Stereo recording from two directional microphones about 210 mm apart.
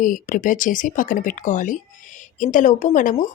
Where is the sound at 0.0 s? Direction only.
40° left (ahead or behind).